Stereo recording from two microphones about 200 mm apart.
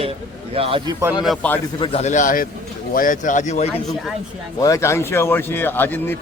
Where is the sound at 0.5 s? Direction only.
30° right (ahead or behind).